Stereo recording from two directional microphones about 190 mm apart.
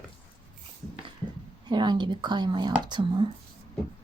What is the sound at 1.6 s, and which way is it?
Speech, 25° right (ahead or behind).